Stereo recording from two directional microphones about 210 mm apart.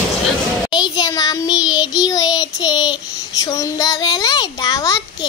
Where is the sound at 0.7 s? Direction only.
20° left (ahead or behind).